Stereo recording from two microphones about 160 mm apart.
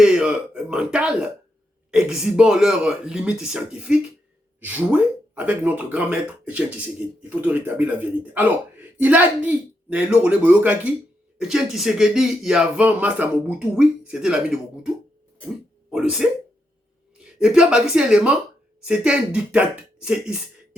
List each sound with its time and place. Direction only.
0.0 s speech: 5° right (ahead or behind)
15.9 s speech: 5° right (ahead or behind)
17.4 s speech: 5° right (ahead or behind)